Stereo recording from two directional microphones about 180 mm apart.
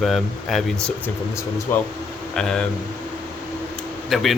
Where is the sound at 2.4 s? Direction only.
5° left (ahead or behind).